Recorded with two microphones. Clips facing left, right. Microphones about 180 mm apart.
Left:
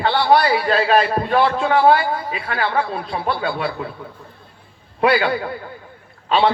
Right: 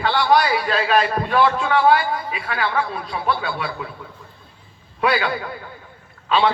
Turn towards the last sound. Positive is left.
turn(degrees=35)  # may be behind; listen again after turning